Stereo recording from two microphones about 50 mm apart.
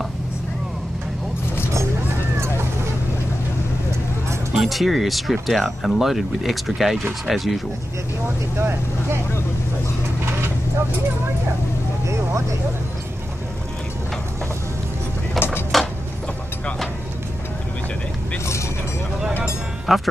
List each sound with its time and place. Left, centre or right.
4.6 s speech: centre
8.5 s speech: right
12.1 s vehicle: right
15.3 s a sound: left
18.4 s vehicle: left
19.9 s speech: centre